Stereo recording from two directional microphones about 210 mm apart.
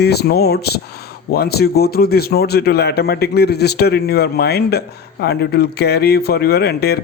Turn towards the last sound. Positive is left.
turn(degrees=50)  # may be behind; listen again after turning